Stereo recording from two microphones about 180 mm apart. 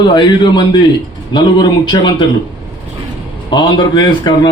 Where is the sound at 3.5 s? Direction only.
25° left (ahead or behind).